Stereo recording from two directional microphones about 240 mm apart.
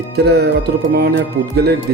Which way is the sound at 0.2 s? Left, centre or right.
Right.